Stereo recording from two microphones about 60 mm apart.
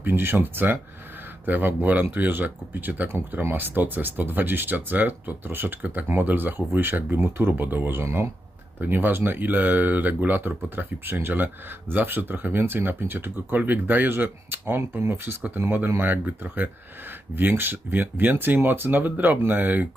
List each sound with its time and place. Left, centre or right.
0.0 s speech: right
8.8 s speech: right